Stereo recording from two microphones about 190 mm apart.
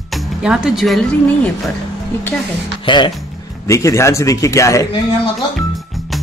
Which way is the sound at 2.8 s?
25° left (ahead or behind).